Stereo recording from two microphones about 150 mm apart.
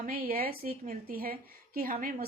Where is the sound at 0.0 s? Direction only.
75° right (ahead or behind).